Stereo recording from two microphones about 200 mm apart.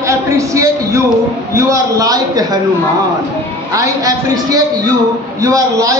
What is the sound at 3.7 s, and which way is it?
A man's voice, 20° right (ahead or behind).